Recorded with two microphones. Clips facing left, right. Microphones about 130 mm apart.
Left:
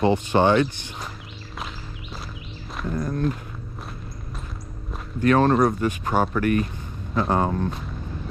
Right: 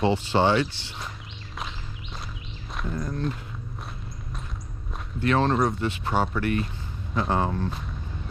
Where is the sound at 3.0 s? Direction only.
50° left (ahead or behind).